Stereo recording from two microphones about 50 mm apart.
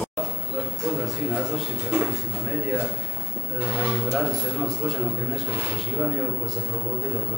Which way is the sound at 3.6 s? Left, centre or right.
Right.